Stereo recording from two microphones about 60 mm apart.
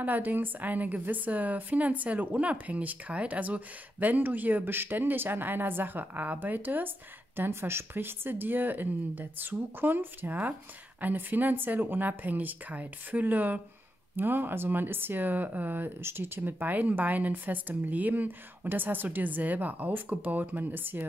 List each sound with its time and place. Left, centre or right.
0.0 s a woman's voice: right